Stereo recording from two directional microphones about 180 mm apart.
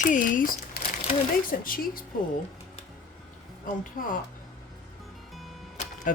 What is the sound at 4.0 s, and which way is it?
Speech, 45° left (ahead or behind).